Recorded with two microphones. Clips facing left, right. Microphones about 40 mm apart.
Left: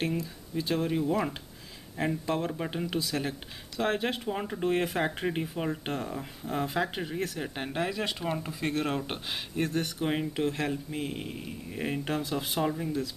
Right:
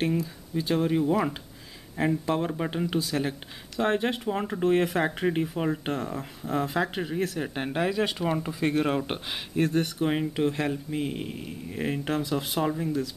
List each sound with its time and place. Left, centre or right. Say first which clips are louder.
0.0 s speech: right 4 dB; centre